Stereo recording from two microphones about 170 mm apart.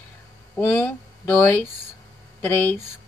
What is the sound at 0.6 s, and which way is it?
Speech, 15° left (ahead or behind).